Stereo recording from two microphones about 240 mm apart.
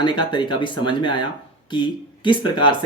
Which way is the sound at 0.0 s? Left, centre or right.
Centre.